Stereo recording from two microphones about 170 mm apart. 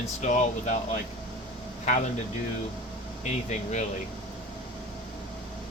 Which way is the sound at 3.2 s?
45° left (ahead or behind).